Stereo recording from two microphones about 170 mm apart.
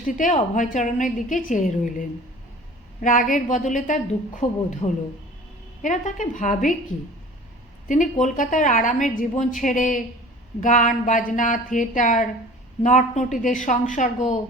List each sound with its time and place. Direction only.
0.5 s a woman's voice: 45° left (ahead or behind)
7.9 s a woman's voice: 50° left (ahead or behind)